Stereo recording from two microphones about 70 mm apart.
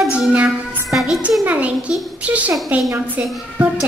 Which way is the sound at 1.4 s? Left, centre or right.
Right.